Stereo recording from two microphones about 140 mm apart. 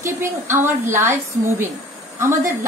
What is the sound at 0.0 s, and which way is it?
A woman's voice, 20° right (ahead or behind).